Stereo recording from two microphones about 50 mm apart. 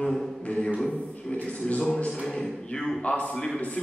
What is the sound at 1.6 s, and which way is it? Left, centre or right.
Speech, left.